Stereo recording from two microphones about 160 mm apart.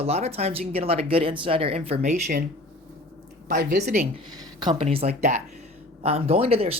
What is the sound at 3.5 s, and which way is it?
Speech, 70° right (ahead or behind).